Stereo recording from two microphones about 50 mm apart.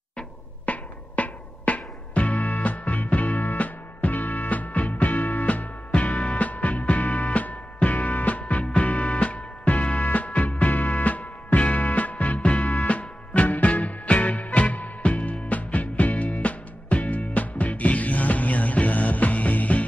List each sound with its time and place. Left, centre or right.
0.7 s music: left